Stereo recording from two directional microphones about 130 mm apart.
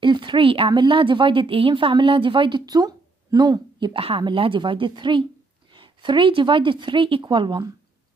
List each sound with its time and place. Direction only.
0.0 s speech: 35° right (ahead or behind)